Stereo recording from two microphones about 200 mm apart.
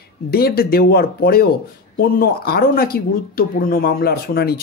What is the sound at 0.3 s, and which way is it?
Speech, 50° left (ahead or behind).